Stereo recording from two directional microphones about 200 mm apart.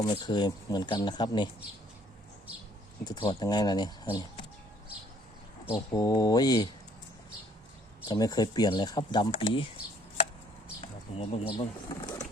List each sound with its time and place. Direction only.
0.0 s speech: 20° left (ahead or behind)
3.0 s speech: 20° left (ahead or behind)
5.7 s speech: 20° left (ahead or behind)
8.0 s speech: 20° left (ahead or behind)
10.8 s pigeon: 30° left (ahead or behind)